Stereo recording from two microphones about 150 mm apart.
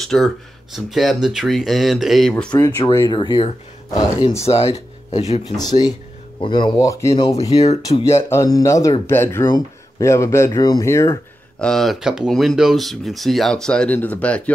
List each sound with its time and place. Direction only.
0.0 s speech: centre (ahead or behind)
2.6 s speech: 20° left (ahead or behind); by 5.2 s 40° left (ahead or behind)
5.6 s speech: 25° left (ahead or behind)
7.5 s speech: 45° left (ahead or behind)
8.0 s speech: 15° left (ahead or behind)
11.6 s speech: centre (ahead or behind)